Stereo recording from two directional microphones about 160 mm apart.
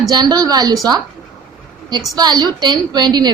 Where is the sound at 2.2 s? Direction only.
25° right (ahead or behind).